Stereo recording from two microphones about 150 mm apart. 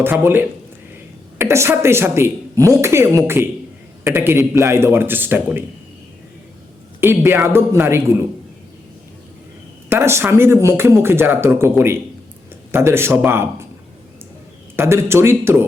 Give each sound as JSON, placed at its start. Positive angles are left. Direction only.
{"t": 0.0, "sound": "a woman's voice", "side_deg": -15}
{"t": 7.0, "sound": "a woman's voice", "side_deg": -15}
{"t": 9.9, "sound": "a woman's voice", "side_deg": -15}
{"t": 12.7, "sound": "a woman's voice", "side_deg": -15}
{"t": 14.8, "sound": "a woman's voice", "side_deg": -15}